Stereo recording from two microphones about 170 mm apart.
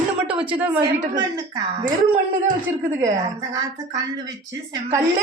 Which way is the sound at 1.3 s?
25° right (ahead or behind).